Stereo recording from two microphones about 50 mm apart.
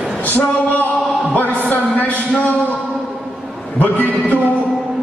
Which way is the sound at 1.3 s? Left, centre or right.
Left.